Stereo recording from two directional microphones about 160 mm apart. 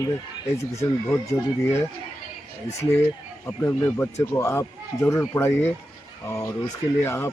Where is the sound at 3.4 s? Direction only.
15° left (ahead or behind).